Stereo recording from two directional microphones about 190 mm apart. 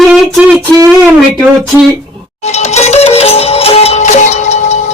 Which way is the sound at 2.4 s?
35° left (ahead or behind).